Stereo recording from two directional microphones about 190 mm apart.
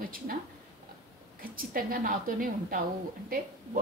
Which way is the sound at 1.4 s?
50° right (ahead or behind).